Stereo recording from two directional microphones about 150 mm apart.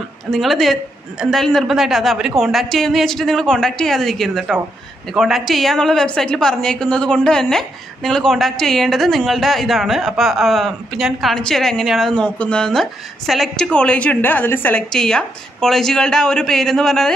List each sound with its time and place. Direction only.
0.3 s a woman's voice: centre (ahead or behind)